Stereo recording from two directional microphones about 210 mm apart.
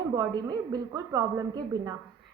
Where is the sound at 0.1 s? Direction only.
20° right (ahead or behind).